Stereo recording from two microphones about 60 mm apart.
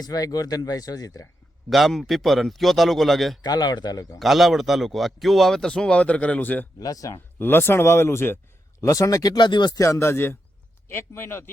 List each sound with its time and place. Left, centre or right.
0.0 s speech: left
1.7 s speech: centre
3.8 s speech: left
4.2 s speech: centre
5.6 s speech: centre
6.7 s speech: left
7.3 s speech: left
8.8 s a man's voice: left